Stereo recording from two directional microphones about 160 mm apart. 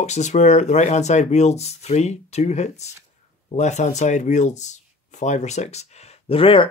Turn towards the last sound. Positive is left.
turn(degrees=35)  # may be behind; listen again after turning